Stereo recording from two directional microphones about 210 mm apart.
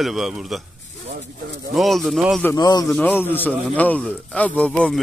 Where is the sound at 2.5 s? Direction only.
20° left (ahead or behind).